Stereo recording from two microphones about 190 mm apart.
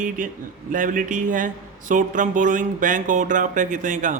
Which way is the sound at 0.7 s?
45° right (ahead or behind).